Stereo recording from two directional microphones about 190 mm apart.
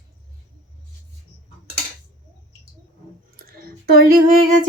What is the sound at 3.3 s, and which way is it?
Clicking, 55° right (ahead or behind).